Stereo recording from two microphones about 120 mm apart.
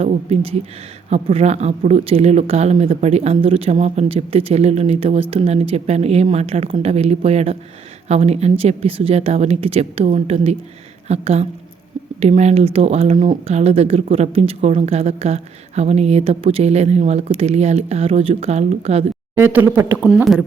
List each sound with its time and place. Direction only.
0.1 s a woman's voice: 60° right (ahead or behind)
19.7 s speech: 15° right (ahead or behind)